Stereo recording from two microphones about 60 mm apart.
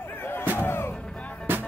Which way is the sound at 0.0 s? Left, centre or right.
Left.